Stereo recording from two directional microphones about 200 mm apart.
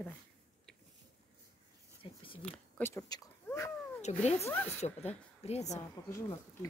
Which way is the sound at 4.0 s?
35° left (ahead or behind).